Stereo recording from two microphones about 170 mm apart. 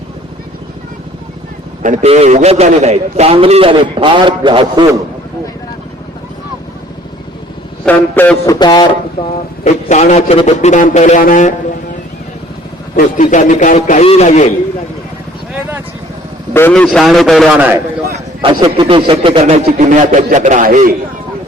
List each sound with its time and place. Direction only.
1.8 s a man's voice: 45° right (ahead or behind); by 4.9 s 25° right (ahead or behind)
7.9 s a man's voice: 10° left (ahead or behind)
8.5 s a man's voice: 25° left (ahead or behind)
9.6 s a man's voice: 45° left (ahead or behind)
13.1 s a man's voice: 45° left (ahead or behind)
16.6 s a man's voice: 10° left (ahead or behind)
17.6 s a man's voice: 10° right (ahead or behind)
18.4 s a man's voice: 30° right (ahead or behind); by 20.9 s 55° right (ahead or behind)